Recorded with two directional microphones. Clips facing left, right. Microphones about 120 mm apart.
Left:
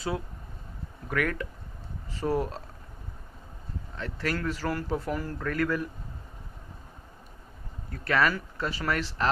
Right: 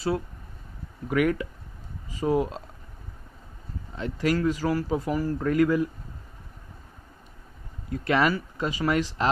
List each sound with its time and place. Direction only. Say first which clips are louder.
1.0 s speech: right 6 dB; 10° right (ahead or behind)
3.9 s speech: right 6 dB; 15° right (ahead or behind)
7.9 s speech: right 3 dB; 15° right (ahead or behind)